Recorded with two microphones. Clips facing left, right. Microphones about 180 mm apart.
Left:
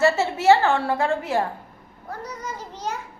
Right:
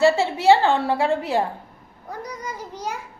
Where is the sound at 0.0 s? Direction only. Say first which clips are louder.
Right 2 dB; 15° right (ahead or behind).